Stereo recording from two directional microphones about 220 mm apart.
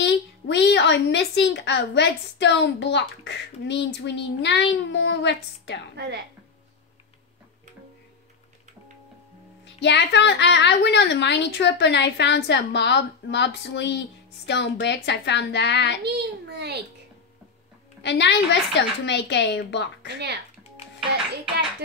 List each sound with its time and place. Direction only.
0.0 s a woman's voice: 50° left (ahead or behind)
5.9 s a child's voice: 50° right (ahead or behind)
9.8 s a woman's voice: 50° left (ahead or behind)
16.0 s a child's voice: 50° right (ahead or behind)
18.0 s a woman's voice: 50° left (ahead or behind)